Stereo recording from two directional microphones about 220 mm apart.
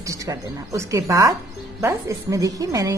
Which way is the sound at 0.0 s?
15° right (ahead or behind).